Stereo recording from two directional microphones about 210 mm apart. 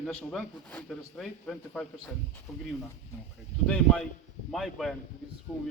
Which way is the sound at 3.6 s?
5° left (ahead or behind).